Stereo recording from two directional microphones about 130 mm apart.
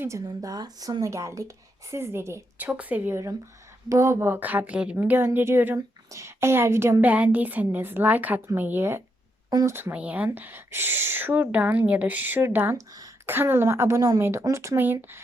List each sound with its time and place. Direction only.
0.3 s a woman's voice: 30° right (ahead or behind)
9.5 s speech: 30° right (ahead or behind)
9.7 s a woman's voice: 15° right (ahead or behind)